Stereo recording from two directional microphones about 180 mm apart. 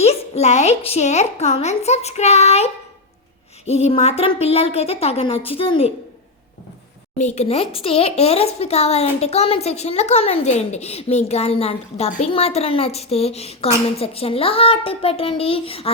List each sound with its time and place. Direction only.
0.0 s a woman's voice: 35° left (ahead or behind)
3.7 s a woman's voice: 40° left (ahead or behind)
7.3 s a woman's voice: 35° left (ahead or behind)